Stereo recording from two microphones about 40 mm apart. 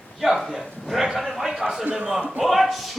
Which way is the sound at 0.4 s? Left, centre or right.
Centre.